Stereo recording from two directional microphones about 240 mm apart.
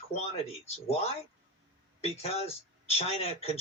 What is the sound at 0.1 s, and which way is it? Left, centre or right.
Speech, left.